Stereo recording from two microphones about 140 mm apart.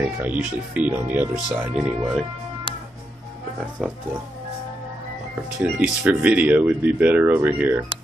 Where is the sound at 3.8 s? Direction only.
Centre (ahead or behind).